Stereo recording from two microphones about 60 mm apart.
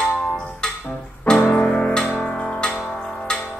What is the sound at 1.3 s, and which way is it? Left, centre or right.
Music, centre.